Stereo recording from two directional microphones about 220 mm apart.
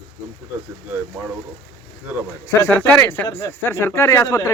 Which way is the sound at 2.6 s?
10° left (ahead or behind).